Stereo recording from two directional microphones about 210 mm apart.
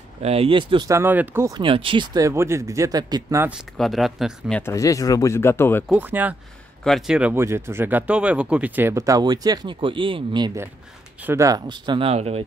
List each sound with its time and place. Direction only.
0.2 s speech: 30° right (ahead or behind); by 5.9 s 10° left (ahead or behind)
5.9 s speech: 10° right (ahead or behind); by 12.4 s 30° right (ahead or behind)